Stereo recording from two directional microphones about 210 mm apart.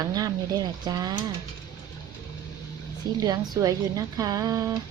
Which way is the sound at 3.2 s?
20° right (ahead or behind).